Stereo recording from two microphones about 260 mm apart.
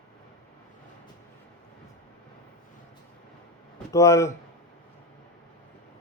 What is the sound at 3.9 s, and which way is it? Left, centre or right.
Speech, centre.